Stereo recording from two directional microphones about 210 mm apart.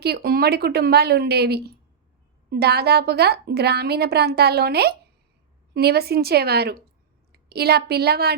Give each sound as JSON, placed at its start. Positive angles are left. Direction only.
{"t": 0.0, "sound": "a woman's voice", "side_deg": -50}